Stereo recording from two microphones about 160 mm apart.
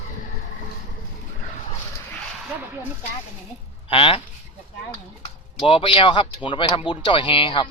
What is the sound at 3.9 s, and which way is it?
Speech, 35° left (ahead or behind).